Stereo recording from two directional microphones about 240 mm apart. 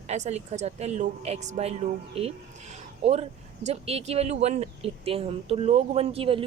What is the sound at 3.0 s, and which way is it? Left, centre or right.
Speech, right.